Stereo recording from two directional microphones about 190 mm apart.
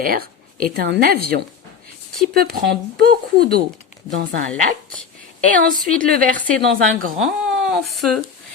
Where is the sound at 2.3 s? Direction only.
50° right (ahead or behind).